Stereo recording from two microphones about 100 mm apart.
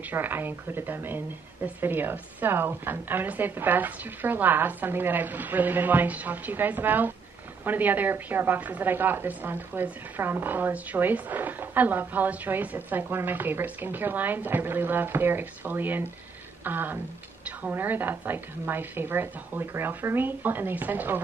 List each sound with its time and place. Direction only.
0.1 s a woman's voice: 20° right (ahead or behind)